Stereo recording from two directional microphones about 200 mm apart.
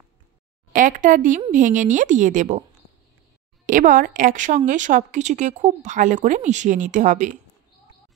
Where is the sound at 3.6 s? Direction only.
40° right (ahead or behind).